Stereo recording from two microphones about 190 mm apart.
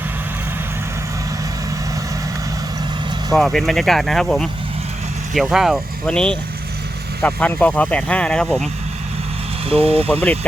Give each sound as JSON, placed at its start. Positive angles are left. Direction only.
{"t": 3.3, "sound": "speech", "side_deg": 0}
{"t": 9.6, "sound": "speech", "side_deg": -30}